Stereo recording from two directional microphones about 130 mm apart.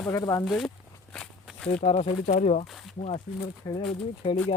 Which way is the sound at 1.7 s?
55° left (ahead or behind).